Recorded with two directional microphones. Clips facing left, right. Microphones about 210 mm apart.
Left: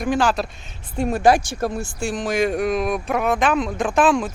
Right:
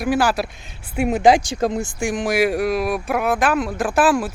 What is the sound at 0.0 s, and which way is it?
Speech, 5° right (ahead or behind).